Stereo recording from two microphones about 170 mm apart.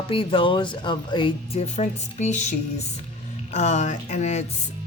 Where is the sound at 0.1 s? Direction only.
30° left (ahead or behind).